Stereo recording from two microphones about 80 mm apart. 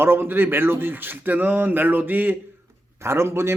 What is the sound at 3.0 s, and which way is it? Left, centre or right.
Speech, right.